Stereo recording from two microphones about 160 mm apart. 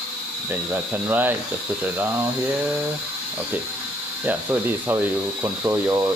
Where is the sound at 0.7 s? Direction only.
10° right (ahead or behind).